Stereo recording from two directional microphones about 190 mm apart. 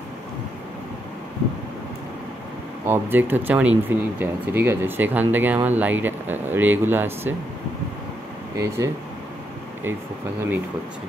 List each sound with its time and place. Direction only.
2.9 s speech: 10° right (ahead or behind)
8.5 s speech: 15° right (ahead or behind)